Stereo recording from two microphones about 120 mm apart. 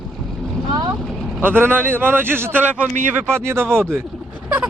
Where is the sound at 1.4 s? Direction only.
15° right (ahead or behind).